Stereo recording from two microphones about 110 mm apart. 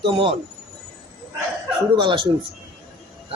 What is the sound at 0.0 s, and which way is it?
Speech, 50° right (ahead or behind).